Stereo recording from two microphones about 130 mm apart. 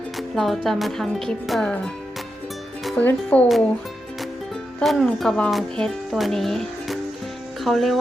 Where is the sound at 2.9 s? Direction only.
10° left (ahead or behind).